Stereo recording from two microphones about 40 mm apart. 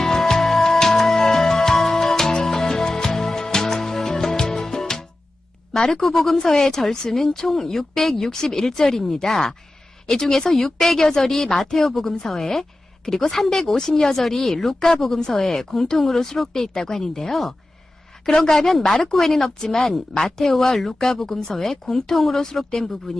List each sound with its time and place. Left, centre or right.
0.0 s music: centre
5.7 s speech: centre
6.4 s a woman's voice: centre